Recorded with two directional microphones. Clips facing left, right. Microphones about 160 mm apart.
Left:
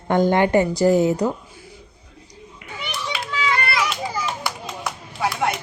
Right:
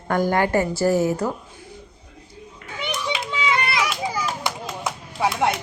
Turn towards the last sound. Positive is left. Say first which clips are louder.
# right 2 dB
turn(degrees=-25)  # may be behind; listen again after turning